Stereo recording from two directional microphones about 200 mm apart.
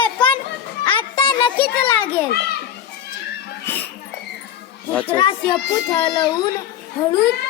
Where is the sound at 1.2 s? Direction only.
25° left (ahead or behind).